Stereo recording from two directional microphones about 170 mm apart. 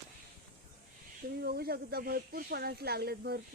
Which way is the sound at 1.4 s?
65° right (ahead or behind).